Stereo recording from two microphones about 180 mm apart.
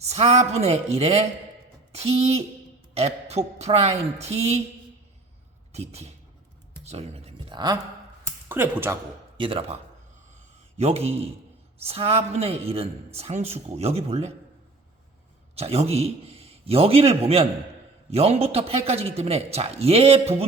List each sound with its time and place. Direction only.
0.0 s a man's voice: 35° right (ahead or behind)
5.7 s a man's voice: 35° right (ahead or behind)
6.8 s a sound: 35° right (ahead or behind)
8.4 s speech: 10° right (ahead or behind)
9.4 s a man's voice: 30° right (ahead or behind)
10.3 s a sound: 35° right (ahead or behind)
11.8 s a man's voice: 35° right (ahead or behind)
15.5 s a man's voice: 35° right (ahead or behind)